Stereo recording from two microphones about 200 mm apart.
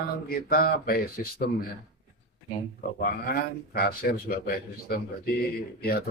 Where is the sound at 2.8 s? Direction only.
50° left (ahead or behind).